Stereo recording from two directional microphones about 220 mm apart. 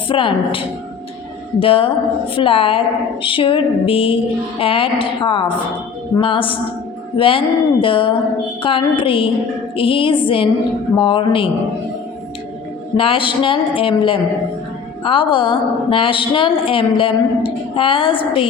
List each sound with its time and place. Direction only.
0.1 s a woman's voice: 25° left (ahead or behind)
13.0 s a woman's voice: 25° left (ahead or behind)